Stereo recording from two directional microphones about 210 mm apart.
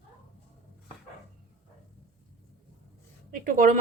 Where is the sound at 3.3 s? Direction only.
40° right (ahead or behind).